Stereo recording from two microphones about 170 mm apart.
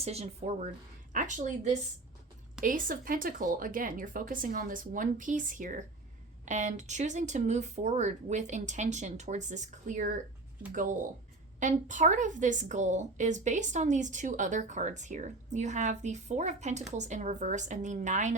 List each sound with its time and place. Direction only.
0.0 s a woman's voice: 40° right (ahead or behind)